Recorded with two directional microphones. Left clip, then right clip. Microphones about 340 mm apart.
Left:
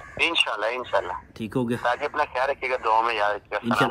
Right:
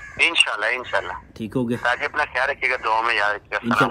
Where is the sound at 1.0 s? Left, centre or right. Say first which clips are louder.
Right 1 dB; centre.